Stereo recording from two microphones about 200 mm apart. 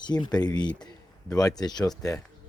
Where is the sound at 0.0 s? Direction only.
20° left (ahead or behind).